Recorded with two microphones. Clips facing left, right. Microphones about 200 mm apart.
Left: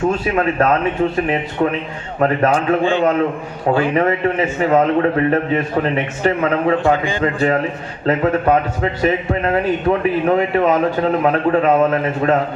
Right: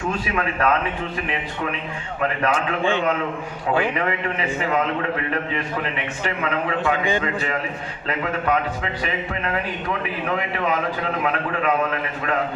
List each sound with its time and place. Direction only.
0.3 s a man's voice: 40° left (ahead or behind)